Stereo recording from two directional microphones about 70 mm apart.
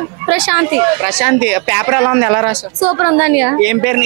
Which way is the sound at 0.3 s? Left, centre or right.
Centre.